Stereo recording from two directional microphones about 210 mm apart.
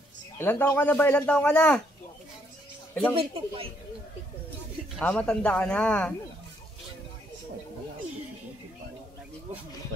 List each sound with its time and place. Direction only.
0.4 s speech: 10° left (ahead or behind)
2.9 s speech: 10° left (ahead or behind)
3.2 s speech: 25° right (ahead or behind)
4.9 s speech: 5° left (ahead or behind)